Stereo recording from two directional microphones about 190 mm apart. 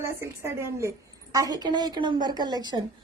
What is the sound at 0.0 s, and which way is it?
A woman's voice, 15° right (ahead or behind).